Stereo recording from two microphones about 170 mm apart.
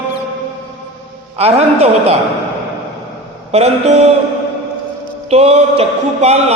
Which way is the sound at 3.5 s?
40° right (ahead or behind).